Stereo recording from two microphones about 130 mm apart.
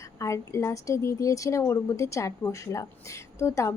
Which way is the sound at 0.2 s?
20° left (ahead or behind).